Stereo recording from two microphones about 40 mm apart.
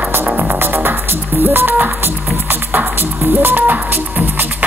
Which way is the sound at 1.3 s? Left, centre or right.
Right.